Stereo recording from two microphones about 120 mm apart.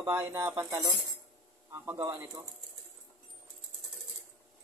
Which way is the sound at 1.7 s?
25° right (ahead or behind).